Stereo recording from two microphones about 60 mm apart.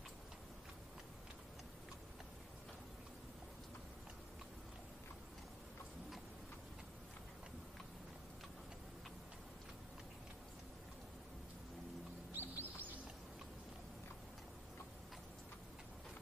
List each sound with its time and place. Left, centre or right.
12.3 s chirp: right